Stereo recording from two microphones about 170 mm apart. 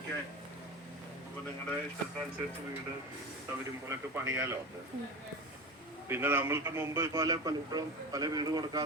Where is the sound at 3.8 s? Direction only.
15° right (ahead or behind).